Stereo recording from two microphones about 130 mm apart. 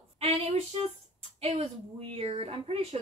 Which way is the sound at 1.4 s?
50° right (ahead or behind).